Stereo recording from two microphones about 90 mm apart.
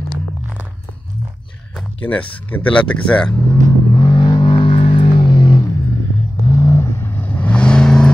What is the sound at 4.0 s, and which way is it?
Vehicle, 50° left (ahead or behind).